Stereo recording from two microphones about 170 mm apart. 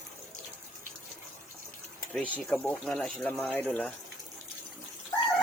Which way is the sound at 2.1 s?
Centre (ahead or behind).